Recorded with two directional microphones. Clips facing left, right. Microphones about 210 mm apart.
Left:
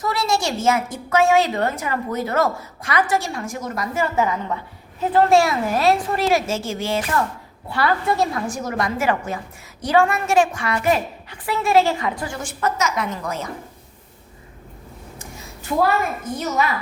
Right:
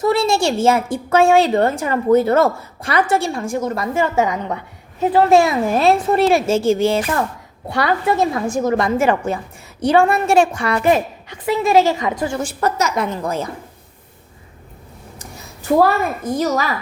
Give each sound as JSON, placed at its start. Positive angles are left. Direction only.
{"t": 0.0, "sound": "a woman's voice", "side_deg": -25}
{"t": 5.3, "sound": "a woman's voice", "side_deg": -20}
{"t": 7.8, "sound": "a woman's voice", "side_deg": -20}
{"t": 12.3, "sound": "a woman's voice", "side_deg": -35}
{"t": 15.8, "sound": "a woman's voice", "side_deg": -35}